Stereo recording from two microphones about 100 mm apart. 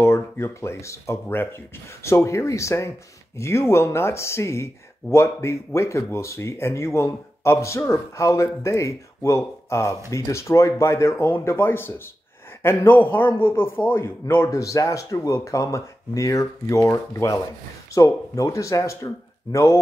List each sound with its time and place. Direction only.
0.0 s a man's voice: 30° left (ahead or behind)